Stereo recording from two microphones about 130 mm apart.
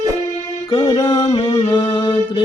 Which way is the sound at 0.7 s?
40° left (ahead or behind).